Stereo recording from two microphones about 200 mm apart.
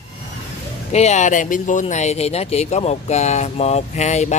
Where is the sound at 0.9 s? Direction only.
35° left (ahead or behind).